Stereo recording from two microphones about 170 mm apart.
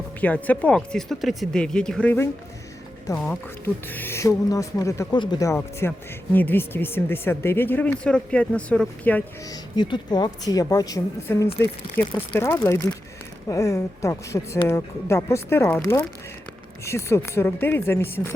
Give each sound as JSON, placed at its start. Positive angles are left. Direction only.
{"t": 0.2, "sound": "speech", "side_deg": 10}
{"t": 9.5, "sound": "a woman's voice", "side_deg": 25}